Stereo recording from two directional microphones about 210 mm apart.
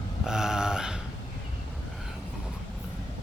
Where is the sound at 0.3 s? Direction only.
5° right (ahead or behind).